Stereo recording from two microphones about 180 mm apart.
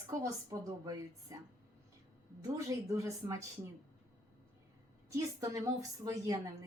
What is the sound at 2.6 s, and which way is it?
Speech, 15° right (ahead or behind).